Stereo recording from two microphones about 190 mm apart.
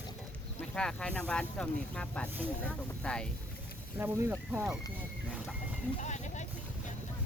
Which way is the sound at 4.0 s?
10° right (ahead or behind).